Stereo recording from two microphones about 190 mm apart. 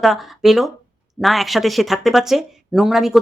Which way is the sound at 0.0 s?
Centre (ahead or behind).